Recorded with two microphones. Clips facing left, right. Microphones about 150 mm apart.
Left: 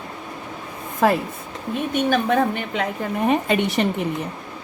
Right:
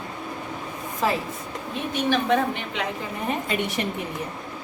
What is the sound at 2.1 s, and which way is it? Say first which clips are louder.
Speech: left 1 dB; 45° left (ahead or behind).